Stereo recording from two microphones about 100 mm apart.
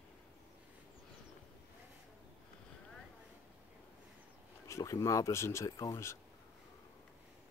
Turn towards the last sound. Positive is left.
turn(degrees=30)  # may be behind; listen again after turning